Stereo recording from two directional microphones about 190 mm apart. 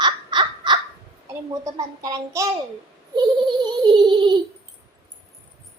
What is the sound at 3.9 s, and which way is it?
Speech, 25° right (ahead or behind).